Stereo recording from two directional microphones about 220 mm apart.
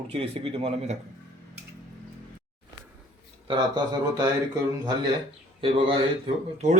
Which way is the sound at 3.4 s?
20° right (ahead or behind).